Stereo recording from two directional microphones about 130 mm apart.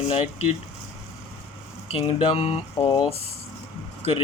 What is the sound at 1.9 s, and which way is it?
Speech, 45° left (ahead or behind).